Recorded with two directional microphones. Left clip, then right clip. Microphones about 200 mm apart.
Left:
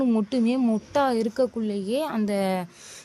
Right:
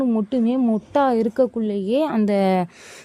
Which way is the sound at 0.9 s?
30° right (ahead or behind).